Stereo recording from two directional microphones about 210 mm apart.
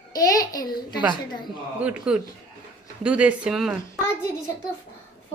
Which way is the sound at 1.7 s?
5° right (ahead or behind).